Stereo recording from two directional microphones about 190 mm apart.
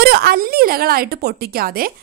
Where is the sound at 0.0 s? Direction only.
55° right (ahead or behind).